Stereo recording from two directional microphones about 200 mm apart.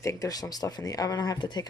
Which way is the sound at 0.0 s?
15° left (ahead or behind).